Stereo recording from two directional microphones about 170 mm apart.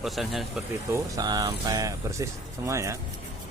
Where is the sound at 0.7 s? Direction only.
20° right (ahead or behind).